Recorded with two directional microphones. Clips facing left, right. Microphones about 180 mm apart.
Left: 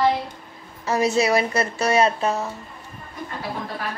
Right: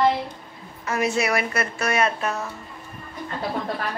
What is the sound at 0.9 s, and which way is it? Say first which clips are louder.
A woman's voice: left 4 dB; 30° left (ahead or behind).